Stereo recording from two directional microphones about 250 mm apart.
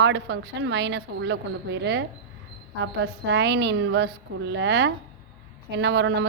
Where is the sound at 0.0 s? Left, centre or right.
Right.